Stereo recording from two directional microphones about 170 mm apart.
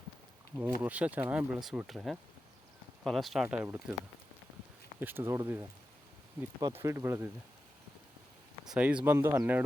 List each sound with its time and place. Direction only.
0.5 s speech: 10° right (ahead or behind)
4.9 s speech: 10° right (ahead or behind)
8.6 s speech: 5° right (ahead or behind)